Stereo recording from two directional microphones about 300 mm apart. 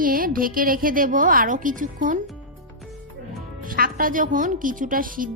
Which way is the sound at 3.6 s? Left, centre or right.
Right.